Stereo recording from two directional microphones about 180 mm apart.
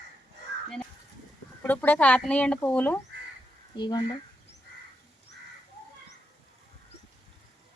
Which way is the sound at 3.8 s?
25° left (ahead or behind).